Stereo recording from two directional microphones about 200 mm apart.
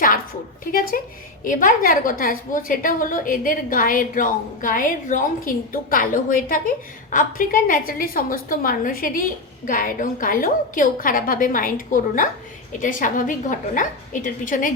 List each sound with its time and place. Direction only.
0.6 s a woman's voice: 45° left (ahead or behind)